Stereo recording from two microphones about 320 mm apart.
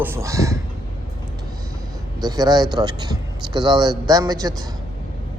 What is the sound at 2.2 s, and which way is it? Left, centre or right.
A man's voice, centre.